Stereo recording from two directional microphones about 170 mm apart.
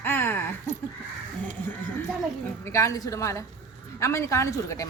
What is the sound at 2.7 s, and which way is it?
Speech, 15° left (ahead or behind).